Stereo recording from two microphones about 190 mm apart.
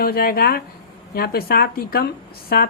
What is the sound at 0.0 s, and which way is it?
A woman's voice, 50° left (ahead or behind).